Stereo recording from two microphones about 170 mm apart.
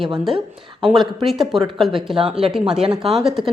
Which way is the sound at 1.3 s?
Centre (ahead or behind).